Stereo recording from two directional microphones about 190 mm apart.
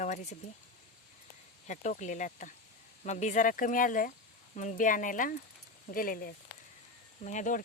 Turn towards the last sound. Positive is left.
turn(degrees=40)  # may be behind; listen again after turning